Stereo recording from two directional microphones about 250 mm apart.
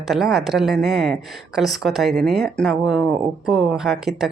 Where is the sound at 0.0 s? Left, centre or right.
Centre.